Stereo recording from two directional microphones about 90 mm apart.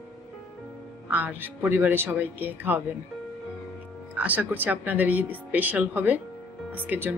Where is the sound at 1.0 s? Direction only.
20° right (ahead or behind).